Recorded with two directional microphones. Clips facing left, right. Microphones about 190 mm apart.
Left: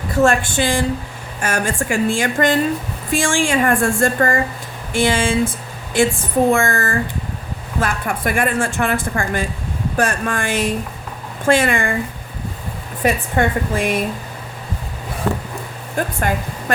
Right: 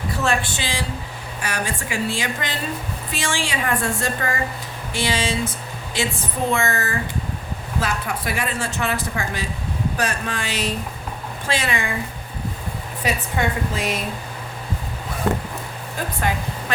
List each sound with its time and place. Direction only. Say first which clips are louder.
0.2 s a woman's voice: left 9 dB; 50° left (ahead or behind)
13.0 s a woman's voice: left 6 dB; 50° left (ahead or behind)
16.0 s a woman's voice: left 7 dB; 50° left (ahead or behind)